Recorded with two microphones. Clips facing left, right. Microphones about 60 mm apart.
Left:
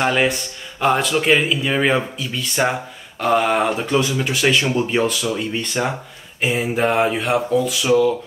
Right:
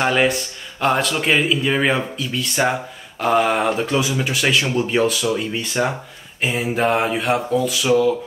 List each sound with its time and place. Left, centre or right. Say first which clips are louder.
0.0 s speech: even; centre